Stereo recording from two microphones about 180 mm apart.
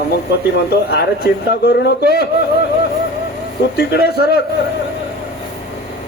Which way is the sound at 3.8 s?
65° left (ahead or behind).